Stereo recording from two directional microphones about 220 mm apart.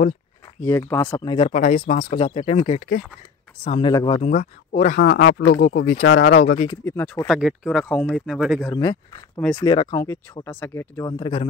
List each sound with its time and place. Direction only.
0.6 s speech: 10° left (ahead or behind)
1.5 s speech: 30° left (ahead or behind)
6.0 s speech: 60° left (ahead or behind)
6.7 s speech: 10° left (ahead or behind)
7.2 s speech: centre (ahead or behind)
8.7 s speech: 20° left (ahead or behind)